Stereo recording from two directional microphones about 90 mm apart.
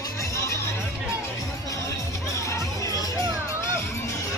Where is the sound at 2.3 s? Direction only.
35° left (ahead or behind).